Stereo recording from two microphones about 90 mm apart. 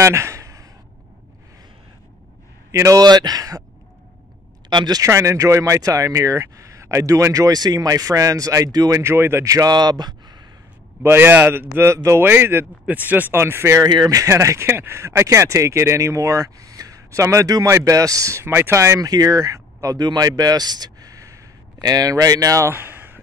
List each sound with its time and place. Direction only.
0.0 s a sound: 35° right (ahead or behind)
2.7 s speech: 35° right (ahead or behind)
3.0 s a man's voice: 50° right (ahead or behind)
4.6 s speech: 55° right (ahead or behind)
5.0 s speech: 35° right (ahead or behind)
9.0 s a man's voice: 30° right (ahead or behind); by 10.4 s 50° right (ahead or behind)
11.0 s speech: 25° right (ahead or behind)
22.7 s a sound: 25° right (ahead or behind)